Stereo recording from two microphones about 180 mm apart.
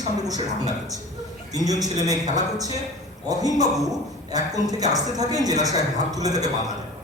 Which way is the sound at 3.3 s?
20° right (ahead or behind).